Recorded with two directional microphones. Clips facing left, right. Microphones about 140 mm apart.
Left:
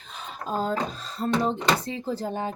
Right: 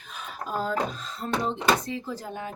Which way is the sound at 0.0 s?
30° left (ahead or behind).